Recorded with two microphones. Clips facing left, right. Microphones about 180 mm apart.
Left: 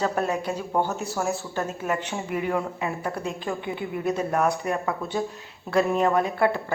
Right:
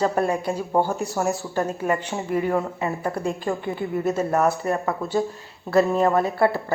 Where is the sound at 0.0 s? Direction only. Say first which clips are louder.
Right 3 dB; 10° right (ahead or behind).